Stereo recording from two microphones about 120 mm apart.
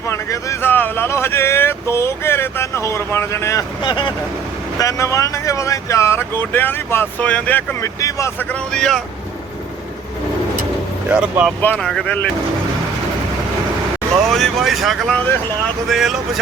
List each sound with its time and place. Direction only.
0.0 s speech: 25° left (ahead or behind)
3.8 s speech: 40° left (ahead or behind)
4.8 s speech: 25° left (ahead or behind)
7.8 s speech: 25° left (ahead or behind)
8.4 s speech: 10° left (ahead or behind)
11.1 s speech: 10° right (ahead or behind)
11.6 s speech: 15° left (ahead or behind)
11.9 s speech: centre (ahead or behind)
14.3 s speech: centre (ahead or behind)